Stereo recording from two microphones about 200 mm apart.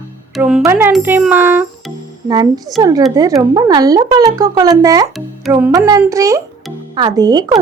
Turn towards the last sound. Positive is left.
turn(degrees=-20)  # may be behind; listen again after turning